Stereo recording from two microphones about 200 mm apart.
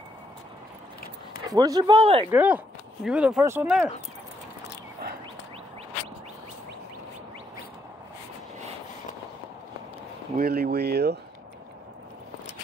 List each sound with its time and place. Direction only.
1.5 s a man's voice: 20° right (ahead or behind)
2.3 s speech: 5° right (ahead or behind)
10.3 s speech: 50° right (ahead or behind)